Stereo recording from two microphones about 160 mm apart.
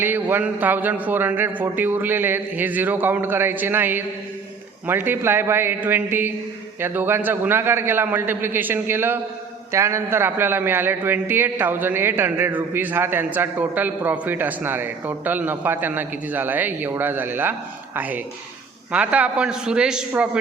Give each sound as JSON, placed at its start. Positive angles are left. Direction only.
{"t": 0.0, "sound": "a man's voice", "side_deg": -10}